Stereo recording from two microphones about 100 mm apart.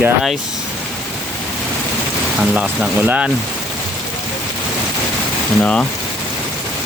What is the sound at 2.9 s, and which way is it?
Speech, 15° right (ahead or behind).